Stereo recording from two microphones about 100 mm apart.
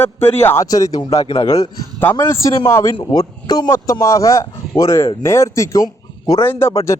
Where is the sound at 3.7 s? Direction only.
30° left (ahead or behind).